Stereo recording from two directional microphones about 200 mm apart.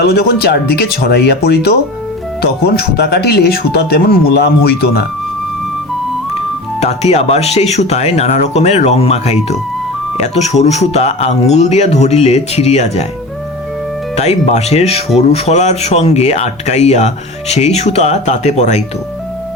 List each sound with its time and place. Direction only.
0.0 s speech: 50° left (ahead or behind)
6.7 s speech: 35° left (ahead or behind)
14.2 s speech: 35° left (ahead or behind)